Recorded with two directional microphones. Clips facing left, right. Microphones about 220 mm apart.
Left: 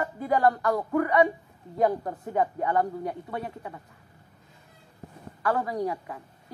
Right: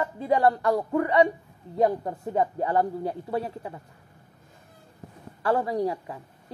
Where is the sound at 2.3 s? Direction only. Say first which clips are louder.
Right 1 dB; 30° right (ahead or behind).